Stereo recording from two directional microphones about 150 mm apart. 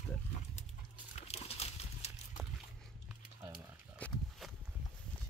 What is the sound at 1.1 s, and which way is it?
Horse, 45° left (ahead or behind).